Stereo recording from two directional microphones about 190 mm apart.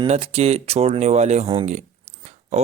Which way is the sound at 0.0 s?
35° right (ahead or behind).